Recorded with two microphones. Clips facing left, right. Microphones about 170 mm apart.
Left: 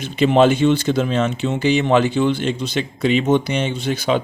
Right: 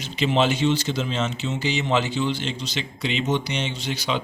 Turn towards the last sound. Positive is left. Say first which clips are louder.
# left 8 dB
turn(degrees=50)  # may be behind; listen again after turning